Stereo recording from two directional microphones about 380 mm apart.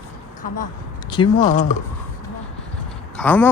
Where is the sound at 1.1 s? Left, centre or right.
Centre.